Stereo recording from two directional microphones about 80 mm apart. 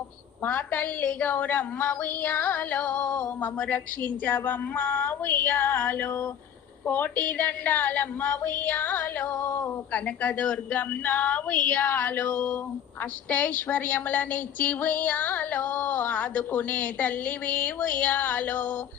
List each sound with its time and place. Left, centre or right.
0.4 s a woman's voice: left
9.3 s male singing: left
9.9 s a woman's voice: centre